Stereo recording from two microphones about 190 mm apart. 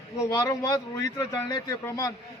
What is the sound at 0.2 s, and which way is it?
A man's voice, 15° left (ahead or behind).